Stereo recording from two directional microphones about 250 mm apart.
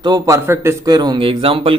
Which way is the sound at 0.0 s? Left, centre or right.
Centre.